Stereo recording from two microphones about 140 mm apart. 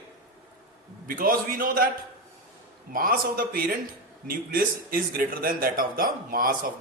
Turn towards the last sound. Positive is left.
turn(degrees=-90)